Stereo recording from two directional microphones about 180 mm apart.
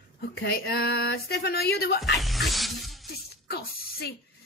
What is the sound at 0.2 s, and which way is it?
Speech, 60° left (ahead or behind).